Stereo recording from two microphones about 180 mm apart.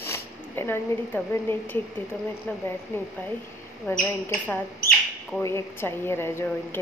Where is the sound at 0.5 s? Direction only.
10° left (ahead or behind).